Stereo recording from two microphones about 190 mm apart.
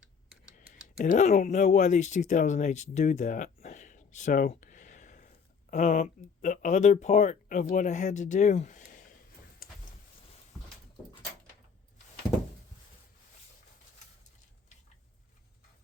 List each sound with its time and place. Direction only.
0.9 s speech: 40° left (ahead or behind)
9.6 s vehicle: 50° left (ahead or behind)